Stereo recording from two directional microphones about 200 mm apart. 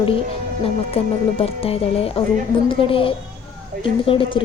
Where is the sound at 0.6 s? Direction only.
30° left (ahead or behind).